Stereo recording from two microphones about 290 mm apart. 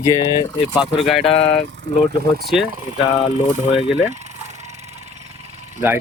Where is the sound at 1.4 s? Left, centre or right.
Centre.